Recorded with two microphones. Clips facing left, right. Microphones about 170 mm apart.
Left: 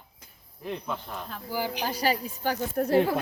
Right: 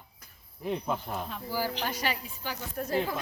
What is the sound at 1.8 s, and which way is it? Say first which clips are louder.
A woman's voice: left 5 dB; 35° left (ahead or behind).